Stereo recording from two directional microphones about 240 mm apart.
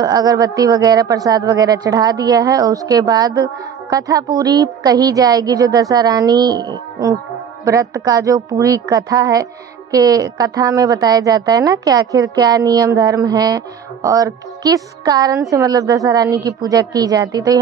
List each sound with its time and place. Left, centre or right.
0.0 s a woman's voice: centre